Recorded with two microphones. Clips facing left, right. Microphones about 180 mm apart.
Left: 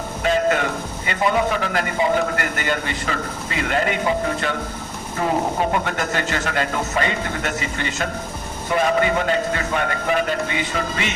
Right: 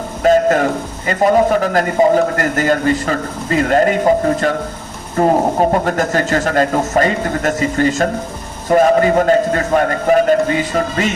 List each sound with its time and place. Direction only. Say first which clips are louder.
0.2 s a man's voice: right 8 dB; 45° right (ahead or behind)